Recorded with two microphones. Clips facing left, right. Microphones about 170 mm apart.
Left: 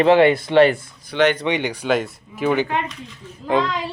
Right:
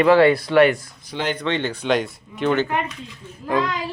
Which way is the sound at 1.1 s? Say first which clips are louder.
Left 8 dB; 70° left (ahead or behind).